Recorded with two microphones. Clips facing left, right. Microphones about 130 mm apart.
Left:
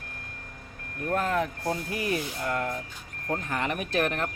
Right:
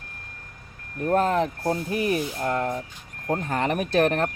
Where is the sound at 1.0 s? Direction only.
30° right (ahead or behind).